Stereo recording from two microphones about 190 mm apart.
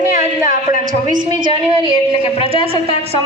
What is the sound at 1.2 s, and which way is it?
A woman's voice, 25° right (ahead or behind).